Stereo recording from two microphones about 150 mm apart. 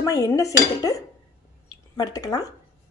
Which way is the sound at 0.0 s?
20° left (ahead or behind).